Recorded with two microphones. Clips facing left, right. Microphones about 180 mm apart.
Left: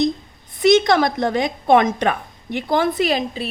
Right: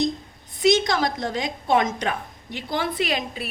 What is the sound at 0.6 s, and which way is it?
A woman's voice, 60° left (ahead or behind).